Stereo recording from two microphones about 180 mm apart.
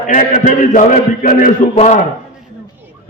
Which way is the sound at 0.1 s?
45° left (ahead or behind).